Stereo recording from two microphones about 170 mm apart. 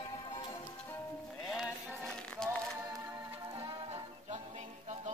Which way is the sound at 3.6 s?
40° right (ahead or behind).